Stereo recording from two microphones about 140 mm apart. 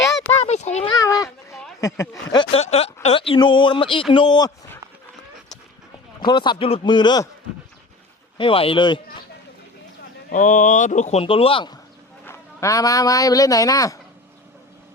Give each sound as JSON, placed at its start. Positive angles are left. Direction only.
{"t": 0.0, "sound": "a sound", "side_deg": 20}
{"t": 0.3, "sound": "a sound", "side_deg": 50}
{"t": 0.9, "sound": "a sound", "side_deg": 25}
{"t": 1.8, "sound": "speech", "side_deg": 25}
{"t": 2.5, "sound": "a man's voice", "side_deg": 50}
{"t": 6.1, "sound": "a man's voice", "side_deg": 30}
{"t": 8.4, "sound": "a man's voice", "side_deg": 40}
{"t": 10.2, "sound": "speech", "side_deg": 65}
{"t": 12.2, "sound": "speech", "side_deg": 20}